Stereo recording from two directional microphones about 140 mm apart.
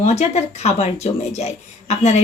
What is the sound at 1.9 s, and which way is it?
Speech, 50° left (ahead or behind).